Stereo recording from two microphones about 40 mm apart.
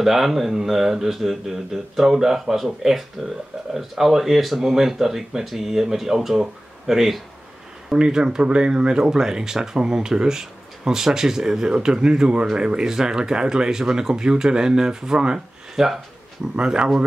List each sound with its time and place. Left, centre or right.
0.0 s speech: centre
7.9 s speech: right
16.5 s speech: right